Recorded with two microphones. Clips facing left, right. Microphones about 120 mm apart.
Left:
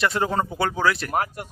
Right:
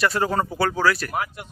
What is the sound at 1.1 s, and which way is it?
Speech, 45° left (ahead or behind).